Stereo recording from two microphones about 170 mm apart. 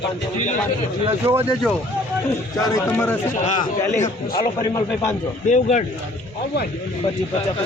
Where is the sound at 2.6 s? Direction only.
15° left (ahead or behind).